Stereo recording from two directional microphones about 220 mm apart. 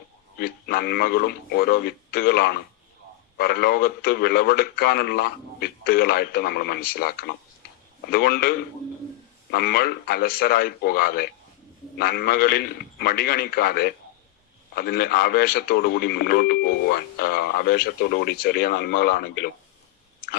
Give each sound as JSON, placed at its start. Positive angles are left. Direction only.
{"t": 0.3, "sound": "speech", "side_deg": 45}